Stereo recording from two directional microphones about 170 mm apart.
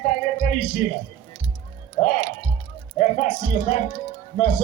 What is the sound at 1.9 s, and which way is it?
Speech, 45° left (ahead or behind).